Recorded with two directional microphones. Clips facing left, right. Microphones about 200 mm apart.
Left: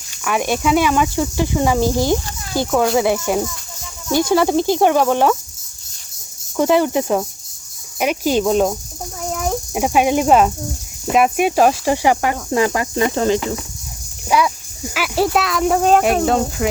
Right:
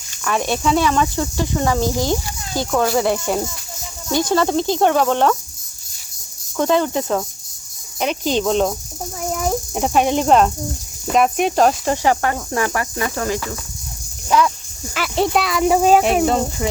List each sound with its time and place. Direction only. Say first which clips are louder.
0.3 s speech: left 1 dB; 10° left (ahead or behind)
2.6 s speech: left 2 dB; 5° left (ahead or behind)
6.6 s speech: left 2 dB; 10° left (ahead or behind)
14.3 s speech: even; 10° left (ahead or behind)